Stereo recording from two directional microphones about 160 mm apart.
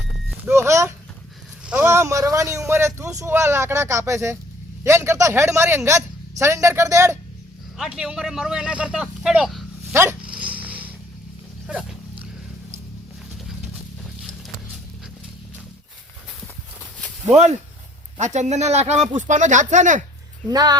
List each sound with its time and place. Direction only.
0.5 s a sound: 20° right (ahead or behind)
1.6 s a man's voice: 10° right (ahead or behind)
7.8 s speech: 5° right (ahead or behind)
9.9 s dog: 15° right (ahead or behind)
10.7 s a sound: 10° right (ahead or behind)
11.6 s dog: 5° right (ahead or behind)
17.2 s speech: 45° right (ahead or behind)
20.5 s speech: 25° right (ahead or behind)